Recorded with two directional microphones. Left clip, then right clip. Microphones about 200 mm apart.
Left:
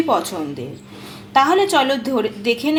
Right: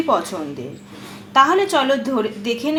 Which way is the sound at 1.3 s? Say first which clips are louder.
Even; 10° left (ahead or behind).